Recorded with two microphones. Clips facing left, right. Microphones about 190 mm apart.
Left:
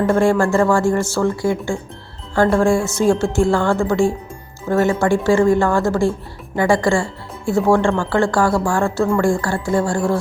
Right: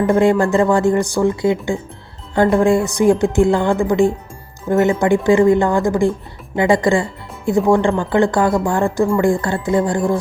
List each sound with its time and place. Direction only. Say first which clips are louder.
0.0 s speech: right 1 dB; 20° right (ahead or behind)